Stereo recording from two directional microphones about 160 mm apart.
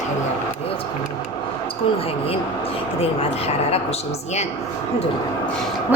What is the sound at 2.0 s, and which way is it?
A woman's voice, 35° left (ahead or behind).